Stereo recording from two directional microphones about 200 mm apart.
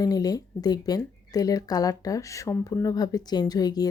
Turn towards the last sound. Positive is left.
turn(degrees=20)  # may be behind; listen again after turning